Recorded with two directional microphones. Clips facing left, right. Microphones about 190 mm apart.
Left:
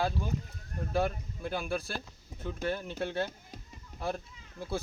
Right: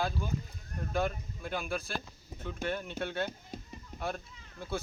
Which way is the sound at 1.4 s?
30° left (ahead or behind).